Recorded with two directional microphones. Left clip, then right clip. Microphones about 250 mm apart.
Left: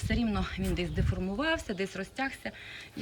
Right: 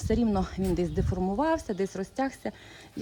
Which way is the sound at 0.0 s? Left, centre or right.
Centre.